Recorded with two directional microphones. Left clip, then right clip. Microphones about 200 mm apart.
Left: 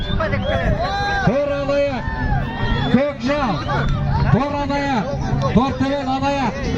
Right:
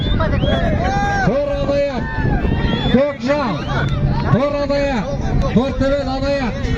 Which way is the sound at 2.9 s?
45° right (ahead or behind).